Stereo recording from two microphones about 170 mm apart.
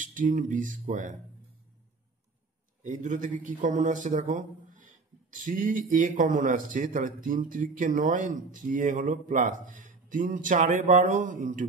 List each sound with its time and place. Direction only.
0.0 s a man's voice: 50° right (ahead or behind)
2.8 s a man's voice: 45° right (ahead or behind)